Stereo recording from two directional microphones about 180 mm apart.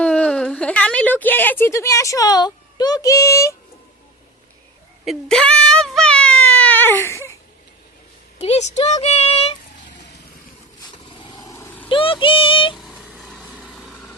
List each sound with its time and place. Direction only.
0.0 s a woman's voice: 5° left (ahead or behind)
5.0 s a sound: 5° left (ahead or behind)
8.4 s speech: 40° left (ahead or behind)
11.1 s vehicle: 25° left (ahead or behind)
11.9 s child singing: 30° left (ahead or behind)
12.7 s vehicle: centre (ahead or behind)